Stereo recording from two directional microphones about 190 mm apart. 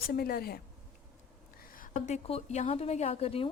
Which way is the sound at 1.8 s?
40° left (ahead or behind).